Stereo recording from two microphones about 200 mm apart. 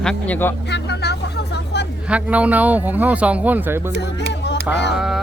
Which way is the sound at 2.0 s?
5° right (ahead or behind).